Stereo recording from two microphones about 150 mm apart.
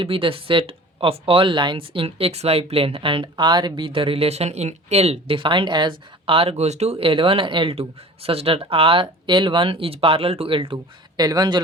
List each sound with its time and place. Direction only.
0.0 s speech: 35° right (ahead or behind)